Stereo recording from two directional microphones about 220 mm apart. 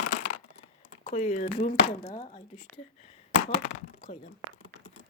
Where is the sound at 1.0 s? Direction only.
35° left (ahead or behind).